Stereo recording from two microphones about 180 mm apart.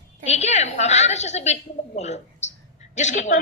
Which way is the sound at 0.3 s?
40° left (ahead or behind).